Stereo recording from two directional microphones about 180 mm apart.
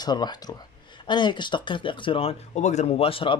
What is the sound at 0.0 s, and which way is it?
Speech, 25° left (ahead or behind).